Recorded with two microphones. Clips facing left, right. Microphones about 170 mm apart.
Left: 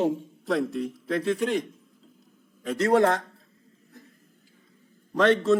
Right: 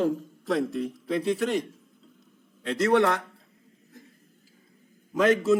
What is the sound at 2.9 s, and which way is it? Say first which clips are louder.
Speech: left 1 dB; 30° left (ahead or behind).